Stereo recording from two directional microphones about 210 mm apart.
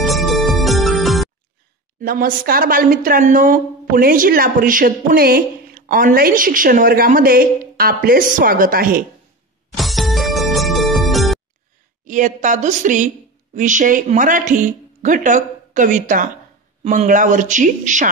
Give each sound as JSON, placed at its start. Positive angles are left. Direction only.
{"t": 0.0, "sound": "music", "side_deg": 0}
{"t": 2.0, "sound": "speech", "side_deg": -40}
{"t": 9.8, "sound": "music", "side_deg": 0}
{"t": 12.0, "sound": "speech", "side_deg": -35}